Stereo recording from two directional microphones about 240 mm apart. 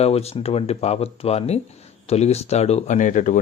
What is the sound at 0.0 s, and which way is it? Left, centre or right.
Speech, left.